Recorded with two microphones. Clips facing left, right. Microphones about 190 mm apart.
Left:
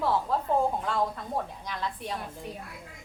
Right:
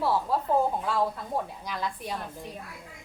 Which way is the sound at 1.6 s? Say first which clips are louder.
Right 1 dB; 10° right (ahead or behind).